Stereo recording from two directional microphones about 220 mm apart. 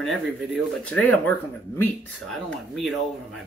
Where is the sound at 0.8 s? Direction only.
5° left (ahead or behind).